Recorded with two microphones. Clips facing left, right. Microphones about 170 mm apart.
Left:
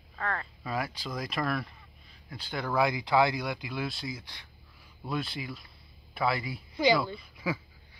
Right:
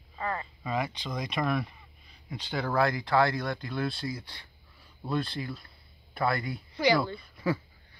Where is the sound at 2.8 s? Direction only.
15° left (ahead or behind).